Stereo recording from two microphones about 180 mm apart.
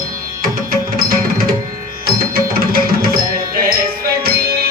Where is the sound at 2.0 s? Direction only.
55° right (ahead or behind).